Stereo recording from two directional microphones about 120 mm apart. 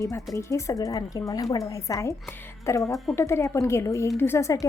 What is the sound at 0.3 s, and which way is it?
A woman's voice, 25° left (ahead or behind).